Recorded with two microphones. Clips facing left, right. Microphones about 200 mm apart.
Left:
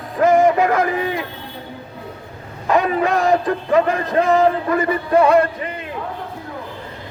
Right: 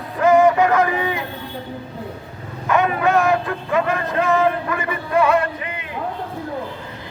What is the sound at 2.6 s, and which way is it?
Speech, 35° left (ahead or behind).